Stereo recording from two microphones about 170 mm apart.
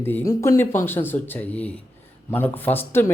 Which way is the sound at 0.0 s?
15° left (ahead or behind).